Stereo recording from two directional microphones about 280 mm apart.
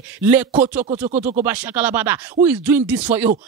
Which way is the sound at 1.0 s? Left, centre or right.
Right.